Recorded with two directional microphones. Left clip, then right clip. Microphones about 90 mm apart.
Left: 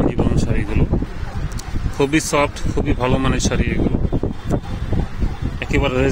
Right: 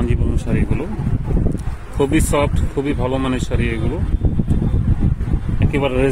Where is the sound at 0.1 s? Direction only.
Centre (ahead or behind).